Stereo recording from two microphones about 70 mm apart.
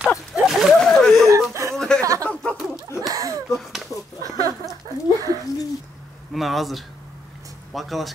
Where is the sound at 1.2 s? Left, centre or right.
Right.